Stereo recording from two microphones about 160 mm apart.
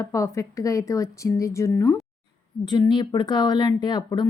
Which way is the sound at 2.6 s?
30° left (ahead or behind).